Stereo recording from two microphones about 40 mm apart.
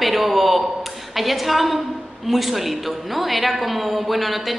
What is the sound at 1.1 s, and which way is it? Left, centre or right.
A man's voice, centre.